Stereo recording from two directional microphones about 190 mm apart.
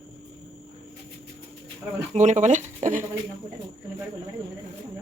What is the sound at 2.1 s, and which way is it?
Speech, 40° right (ahead or behind).